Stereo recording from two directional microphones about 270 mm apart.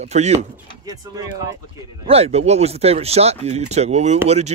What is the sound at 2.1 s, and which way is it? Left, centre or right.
Speech, right.